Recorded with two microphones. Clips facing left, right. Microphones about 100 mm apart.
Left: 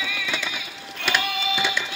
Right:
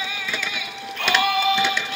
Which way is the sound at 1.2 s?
60° right (ahead or behind).